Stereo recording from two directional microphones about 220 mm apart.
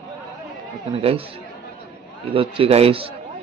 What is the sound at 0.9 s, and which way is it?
Speech, 25° right (ahead or behind).